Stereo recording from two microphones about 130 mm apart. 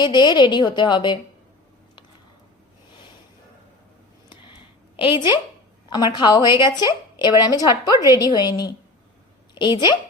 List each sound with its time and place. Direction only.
0.0 s a woman's voice: 35° left (ahead or behind)
4.9 s a woman's voice: 40° left (ahead or behind)